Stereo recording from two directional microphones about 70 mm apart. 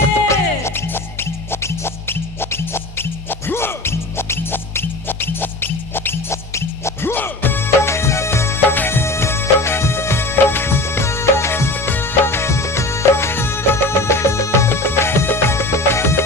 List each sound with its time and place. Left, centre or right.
0.3 s music: left